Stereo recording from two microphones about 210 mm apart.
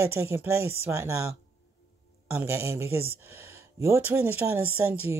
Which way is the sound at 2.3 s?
10° right (ahead or behind).